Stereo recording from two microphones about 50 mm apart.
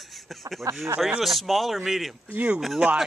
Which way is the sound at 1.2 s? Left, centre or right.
Centre.